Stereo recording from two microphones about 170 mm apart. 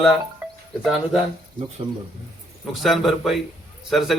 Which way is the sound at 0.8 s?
Centre (ahead or behind).